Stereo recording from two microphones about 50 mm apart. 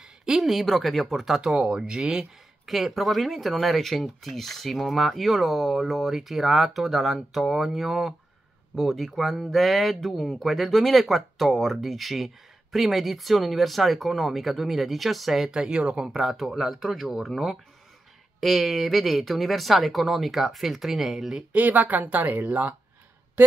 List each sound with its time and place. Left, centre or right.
0.0 s a sound: centre
0.5 s speech: centre
1.4 s speech: centre
15.5 s speech: centre
16.1 s speech: centre
21.5 s speech: right